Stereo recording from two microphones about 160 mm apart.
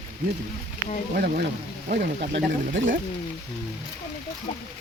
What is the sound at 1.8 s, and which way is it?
Speech, 80° right.